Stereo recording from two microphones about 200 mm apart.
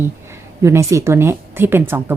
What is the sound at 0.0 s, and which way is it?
A woman's voice, 10° right (ahead or behind).